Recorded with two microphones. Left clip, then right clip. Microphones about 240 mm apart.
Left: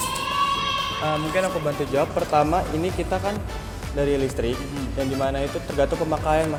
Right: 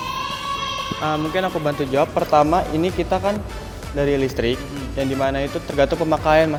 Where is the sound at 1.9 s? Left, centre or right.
Right.